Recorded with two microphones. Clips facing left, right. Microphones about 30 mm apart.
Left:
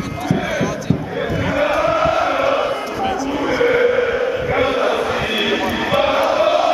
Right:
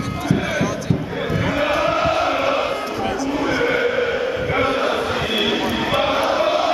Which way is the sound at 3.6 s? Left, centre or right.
Centre.